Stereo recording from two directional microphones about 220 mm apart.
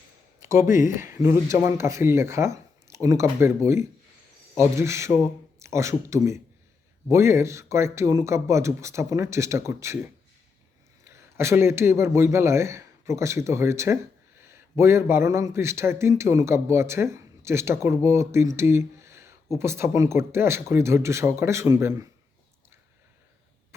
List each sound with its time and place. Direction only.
0.7 s speech: 35° left (ahead or behind)
0.9 s a man's voice: 10° right (ahead or behind)